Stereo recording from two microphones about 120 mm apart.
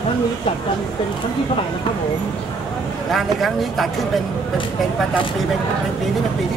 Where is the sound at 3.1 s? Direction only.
Centre (ahead or behind).